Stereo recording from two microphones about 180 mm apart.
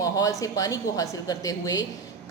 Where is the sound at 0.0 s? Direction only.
20° left (ahead or behind).